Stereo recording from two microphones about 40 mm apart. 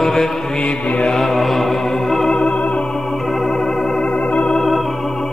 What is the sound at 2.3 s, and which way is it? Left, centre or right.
Organ, centre.